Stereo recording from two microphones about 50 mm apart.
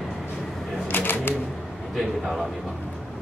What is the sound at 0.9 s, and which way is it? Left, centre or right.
Typewriter, left.